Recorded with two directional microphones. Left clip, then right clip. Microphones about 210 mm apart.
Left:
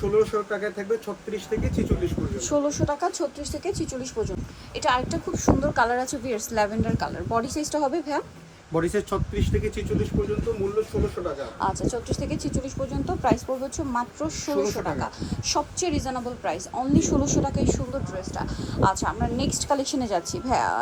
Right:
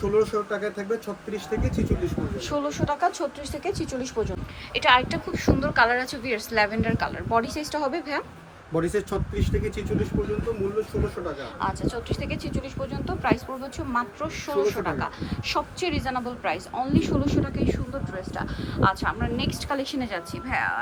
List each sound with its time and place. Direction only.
0.1 s speech: centre (ahead or behind)
2.4 s speech: 15° left (ahead or behind)
8.7 s speech: centre (ahead or behind)
11.6 s speech: 20° left (ahead or behind)